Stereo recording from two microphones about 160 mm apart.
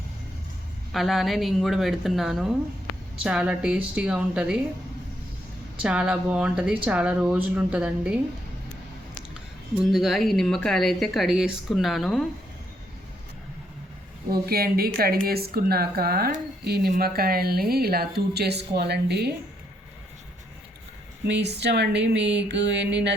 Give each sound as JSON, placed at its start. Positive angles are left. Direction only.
{"t": 0.9, "sound": "a woman's voice", "side_deg": 0}
{"t": 5.8, "sound": "a woman's voice", "side_deg": -5}
{"t": 9.9, "sound": "a woman's voice", "side_deg": 0}
{"t": 14.3, "sound": "speech", "side_deg": -75}
{"t": 16.6, "sound": "speech", "side_deg": -85}
{"t": 17.0, "sound": "speech", "side_deg": -70}
{"t": 21.2, "sound": "speech", "side_deg": -90}